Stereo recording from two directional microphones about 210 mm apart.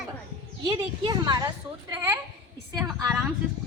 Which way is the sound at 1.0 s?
20° right (ahead or behind).